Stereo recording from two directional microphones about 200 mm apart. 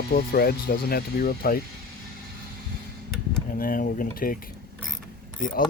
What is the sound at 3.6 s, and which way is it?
Speech, 45° left (ahead or behind).